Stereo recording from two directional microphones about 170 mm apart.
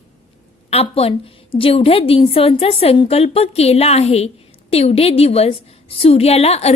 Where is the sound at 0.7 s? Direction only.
35° left (ahead or behind).